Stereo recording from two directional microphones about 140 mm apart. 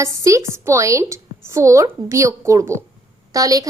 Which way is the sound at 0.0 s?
20° right (ahead or behind).